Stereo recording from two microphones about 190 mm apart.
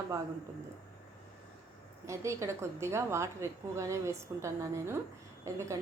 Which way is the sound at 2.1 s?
15° right (ahead or behind).